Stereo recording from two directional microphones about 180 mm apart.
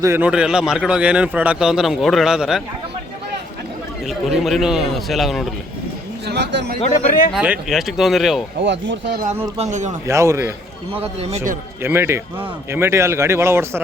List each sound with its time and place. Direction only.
0.0 s a man's voice: 10° right (ahead or behind)
4.0 s a man's voice: centre (ahead or behind)
6.2 s speech: 70° right (ahead or behind)
7.3 s a man's voice: 5° right (ahead or behind)
8.5 s speech: 80° right
9.6 s speech: 40° right (ahead or behind)
10.1 s speech: 15° right (ahead or behind)
10.9 s a man's voice: 35° right (ahead or behind)
11.8 s speech: 15° right (ahead or behind)